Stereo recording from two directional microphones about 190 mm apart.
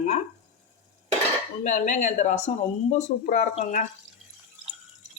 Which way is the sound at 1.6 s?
40° left (ahead or behind).